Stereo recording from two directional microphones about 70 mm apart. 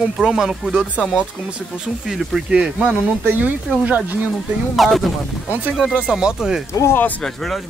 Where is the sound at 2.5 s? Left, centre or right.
Centre.